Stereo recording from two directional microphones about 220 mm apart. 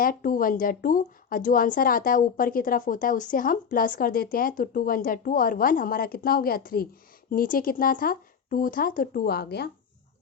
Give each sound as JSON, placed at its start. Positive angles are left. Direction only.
{"t": 0.0, "sound": "a woman's voice", "side_deg": 40}